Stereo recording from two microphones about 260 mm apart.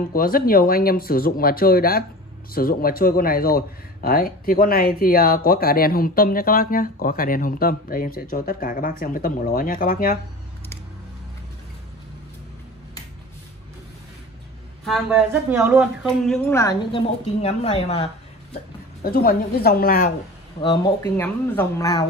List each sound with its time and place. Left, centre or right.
0.1 s speech: left
14.9 s a woman's voice: centre
17.4 s speech: left
19.0 s speech: left
20.6 s speech: centre